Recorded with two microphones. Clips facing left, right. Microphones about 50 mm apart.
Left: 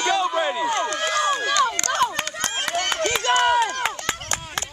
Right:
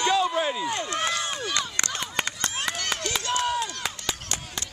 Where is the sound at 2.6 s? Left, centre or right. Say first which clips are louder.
Left 9 dB; left.